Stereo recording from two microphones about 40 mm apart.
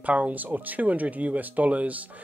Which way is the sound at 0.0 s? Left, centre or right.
Right.